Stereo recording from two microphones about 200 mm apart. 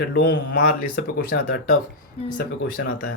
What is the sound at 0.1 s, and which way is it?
Speech, 50° left (ahead or behind).